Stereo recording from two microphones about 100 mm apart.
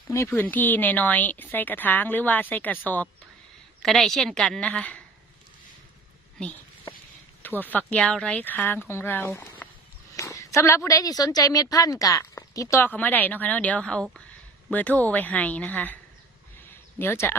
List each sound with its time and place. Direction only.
0.1 s speech: 25° left (ahead or behind)
3.8 s a woman's voice: centre (ahead or behind)
7.4 s speech: 20° left (ahead or behind)
10.2 s a woman's voice: 30° left (ahead or behind)
12.8 s speech: 20° left (ahead or behind)
17.0 s speech: 25° left (ahead or behind)